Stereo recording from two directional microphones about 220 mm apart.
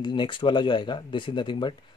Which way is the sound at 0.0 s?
20° left (ahead or behind).